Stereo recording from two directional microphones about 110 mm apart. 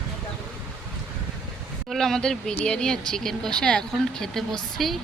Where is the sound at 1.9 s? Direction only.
5° left (ahead or behind).